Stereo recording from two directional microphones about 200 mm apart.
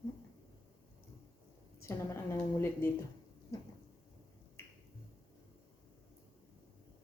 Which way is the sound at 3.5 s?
20° left (ahead or behind).